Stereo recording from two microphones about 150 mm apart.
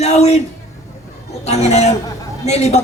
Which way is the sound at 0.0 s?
45° left (ahead or behind).